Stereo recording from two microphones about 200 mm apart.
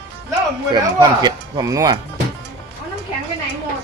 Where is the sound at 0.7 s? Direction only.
20° right (ahead or behind).